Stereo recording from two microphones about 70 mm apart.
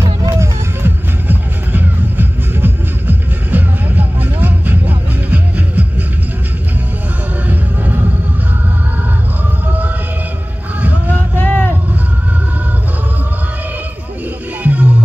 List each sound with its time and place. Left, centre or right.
0.8 s music: right
7.4 s music: right
10.8 s a sound: right
11.3 s vehicle: left
14.6 s music: right